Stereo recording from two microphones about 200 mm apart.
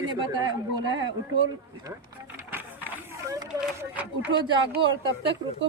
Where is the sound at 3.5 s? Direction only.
5° right (ahead or behind).